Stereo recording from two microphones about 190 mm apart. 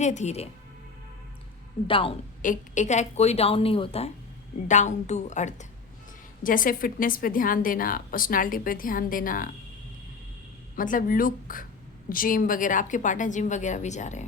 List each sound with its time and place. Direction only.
0.0 s a woman's voice: 35° left (ahead or behind)
1.9 s a woman's voice: 30° left (ahead or behind)
2.4 s a woman's voice: 40° left (ahead or behind)
10.8 s a woman's voice: 45° left (ahead or behind)